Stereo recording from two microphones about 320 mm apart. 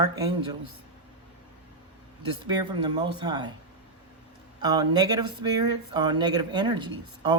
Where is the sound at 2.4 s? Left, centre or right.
Centre.